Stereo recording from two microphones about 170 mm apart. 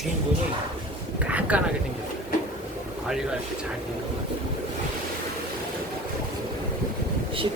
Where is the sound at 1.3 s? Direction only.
10° right (ahead or behind).